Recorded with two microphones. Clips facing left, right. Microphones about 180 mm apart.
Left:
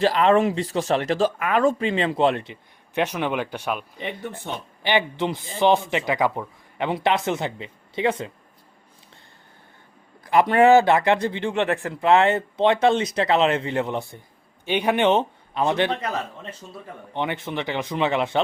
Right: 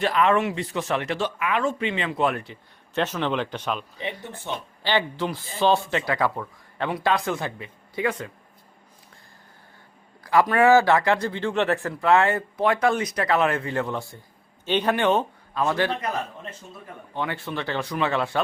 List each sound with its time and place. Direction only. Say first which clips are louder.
0.0 s a man's voice: left 3 dB; 30° left (ahead or behind)
10.2 s a man's voice: left 2 dB; 25° left (ahead or behind)
17.2 s a man's voice: left 2 dB; 20° left (ahead or behind)